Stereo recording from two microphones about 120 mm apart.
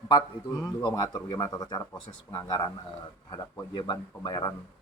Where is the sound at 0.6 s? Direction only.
35° left (ahead or behind).